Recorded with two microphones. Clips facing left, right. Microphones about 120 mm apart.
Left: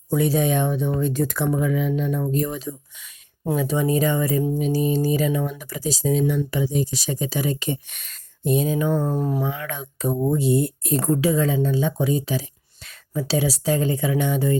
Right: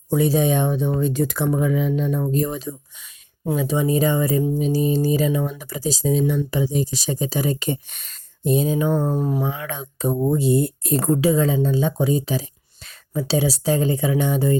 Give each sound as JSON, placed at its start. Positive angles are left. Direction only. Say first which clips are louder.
{"t": 0.1, "sound": "speech", "louder": "right 2 dB", "side_deg": -25}
{"t": 3.5, "sound": "speech", "louder": "right 1 dB", "side_deg": -20}
{"t": 8.9, "sound": "speech", "louder": "right 1 dB", "side_deg": -15}
{"t": 9.4, "sound": "speech", "louder": "right 1 dB", "side_deg": -25}